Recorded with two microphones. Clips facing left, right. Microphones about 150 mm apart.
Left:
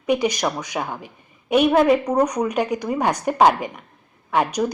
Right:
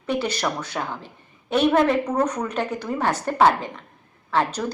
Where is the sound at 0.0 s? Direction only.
15° left (ahead or behind).